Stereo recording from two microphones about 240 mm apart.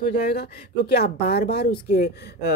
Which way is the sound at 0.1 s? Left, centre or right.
Left.